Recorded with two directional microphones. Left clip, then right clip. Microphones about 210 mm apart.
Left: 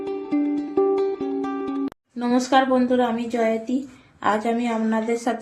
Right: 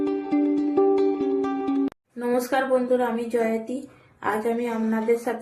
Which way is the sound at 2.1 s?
45° left (ahead or behind).